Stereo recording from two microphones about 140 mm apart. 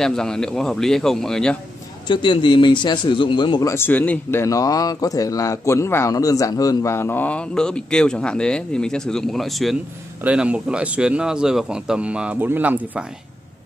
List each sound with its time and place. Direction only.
0.0 s speech: 5° left (ahead or behind)
2.0 s speech: 35° left (ahead or behind)
3.7 s speech: 15° left (ahead or behind); by 13.0 s 10° right (ahead or behind)